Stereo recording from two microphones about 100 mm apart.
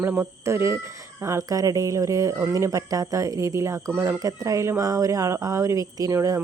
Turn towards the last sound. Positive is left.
turn(degrees=-35)  # may be behind; listen again after turning